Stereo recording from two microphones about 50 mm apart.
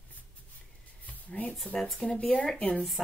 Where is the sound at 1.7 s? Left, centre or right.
Centre.